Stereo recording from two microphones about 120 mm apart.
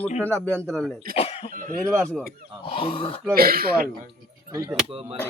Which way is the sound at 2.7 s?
50° left (ahead or behind).